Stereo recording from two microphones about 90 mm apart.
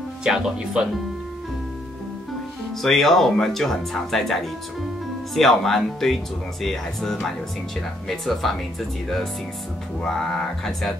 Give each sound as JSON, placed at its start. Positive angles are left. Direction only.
{"t": 0.2, "sound": "speech", "side_deg": -5}
{"t": 2.8, "sound": "speech", "side_deg": 5}
{"t": 10.0, "sound": "speech", "side_deg": 5}